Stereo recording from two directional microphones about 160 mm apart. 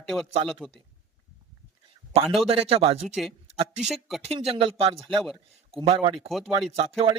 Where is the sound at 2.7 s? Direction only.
35° right (ahead or behind).